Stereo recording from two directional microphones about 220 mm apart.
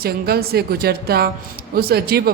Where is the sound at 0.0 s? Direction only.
45° right (ahead or behind).